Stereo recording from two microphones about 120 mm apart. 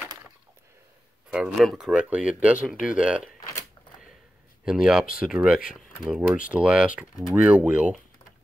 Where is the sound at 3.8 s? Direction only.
35° left (ahead or behind).